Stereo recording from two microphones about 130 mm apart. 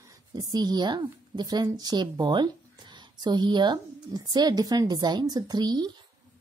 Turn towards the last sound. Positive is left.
turn(degrees=-35)  # may be behind; listen again after turning